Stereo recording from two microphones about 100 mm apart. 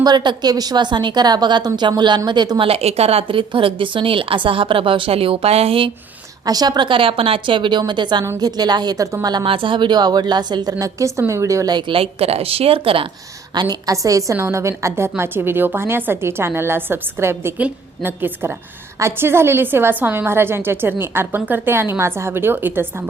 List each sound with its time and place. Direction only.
0.0 s a woman's voice: 45° right (ahead or behind)
2.6 s speech: 90° right; by 5.9 s 70° right (ahead or behind)
6.4 s a woman's voice: 40° right (ahead or behind)
9.5 s a woman's voice: 60° right (ahead or behind); by 11.7 s 30° right (ahead or behind)
11.7 s a woman's voice: 55° right (ahead or behind)
13.5 s a woman's voice: 45° right (ahead or behind); by 23.0 s 20° right (ahead or behind)